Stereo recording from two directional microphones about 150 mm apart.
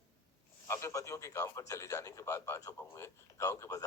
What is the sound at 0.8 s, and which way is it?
A man's voice, 20° left (ahead or behind).